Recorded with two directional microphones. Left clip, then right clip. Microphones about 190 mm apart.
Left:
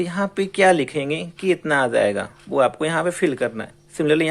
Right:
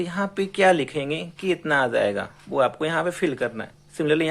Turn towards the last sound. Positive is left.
turn(degrees=15)  # may be behind; listen again after turning